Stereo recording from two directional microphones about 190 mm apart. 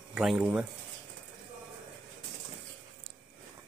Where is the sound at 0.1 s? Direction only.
Centre (ahead or behind).